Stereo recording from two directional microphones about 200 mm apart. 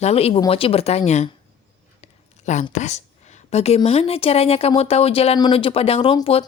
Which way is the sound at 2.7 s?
35° left (ahead or behind).